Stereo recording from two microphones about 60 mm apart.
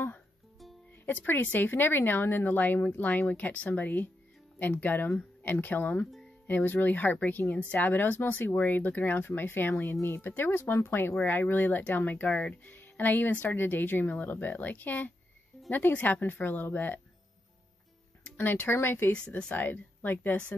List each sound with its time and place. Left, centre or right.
1.0 s speech: left
12.7 s speech: left
18.4 s speech: left
19.1 s speech: centre
19.5 s speech: left